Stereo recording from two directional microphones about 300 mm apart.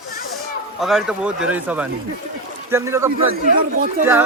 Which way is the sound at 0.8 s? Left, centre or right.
Centre.